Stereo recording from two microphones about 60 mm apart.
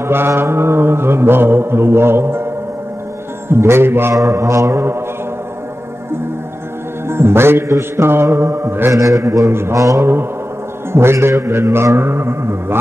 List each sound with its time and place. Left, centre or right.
0.0 s mantra: right
3.4 s mantra: right
4.1 s mantra: right
7.1 s mantra: right
8.9 s a man's voice: right
9.5 s mantra: right
9.8 s a man's voice: right
10.9 s mantra: right